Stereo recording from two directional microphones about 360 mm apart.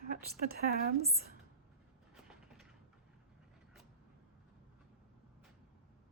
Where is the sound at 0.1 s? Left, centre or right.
Right.